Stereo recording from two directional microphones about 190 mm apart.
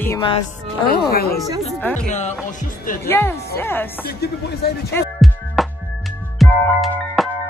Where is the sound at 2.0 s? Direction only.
35° left (ahead or behind).